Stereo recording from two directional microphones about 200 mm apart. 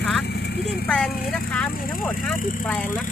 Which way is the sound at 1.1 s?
50° left (ahead or behind).